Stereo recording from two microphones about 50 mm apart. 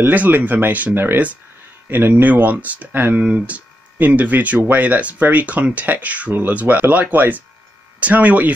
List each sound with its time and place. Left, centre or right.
0.0 s speech: right
0.9 s speech: right
3.2 s speech: right